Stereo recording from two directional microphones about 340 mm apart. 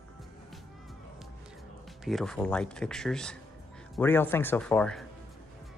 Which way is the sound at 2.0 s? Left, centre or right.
Centre.